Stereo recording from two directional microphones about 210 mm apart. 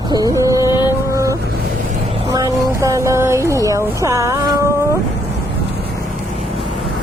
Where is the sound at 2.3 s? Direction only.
15° right (ahead or behind).